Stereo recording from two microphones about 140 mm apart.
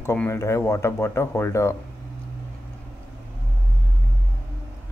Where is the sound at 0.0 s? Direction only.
15° left (ahead or behind).